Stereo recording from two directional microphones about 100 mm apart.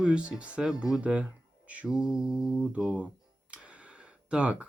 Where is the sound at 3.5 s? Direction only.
10° right (ahead or behind).